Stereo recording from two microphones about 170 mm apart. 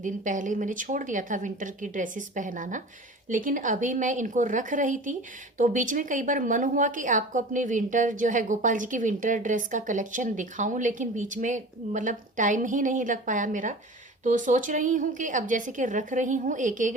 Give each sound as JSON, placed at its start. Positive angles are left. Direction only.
{"t": 0.0, "sound": "a woman's voice", "side_deg": -50}